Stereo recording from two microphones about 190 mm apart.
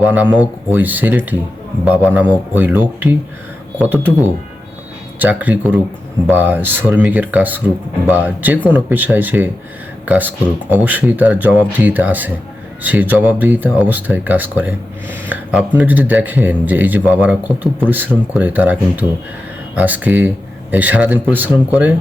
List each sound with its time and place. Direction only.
0.0 s speech: 10° right (ahead or behind)